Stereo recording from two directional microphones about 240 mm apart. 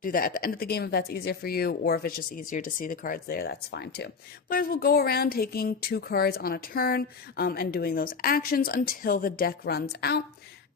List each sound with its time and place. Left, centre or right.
0.0 s speech: left